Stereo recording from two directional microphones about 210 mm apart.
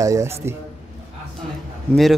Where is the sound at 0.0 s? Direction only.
15° right (ahead or behind).